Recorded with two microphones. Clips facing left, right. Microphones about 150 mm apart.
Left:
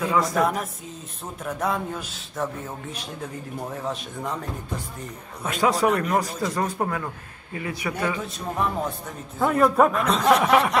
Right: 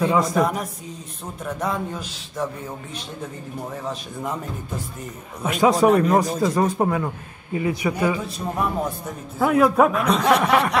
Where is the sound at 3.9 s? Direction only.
Centre (ahead or behind).